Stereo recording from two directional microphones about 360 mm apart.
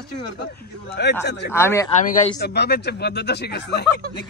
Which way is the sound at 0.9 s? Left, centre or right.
Left.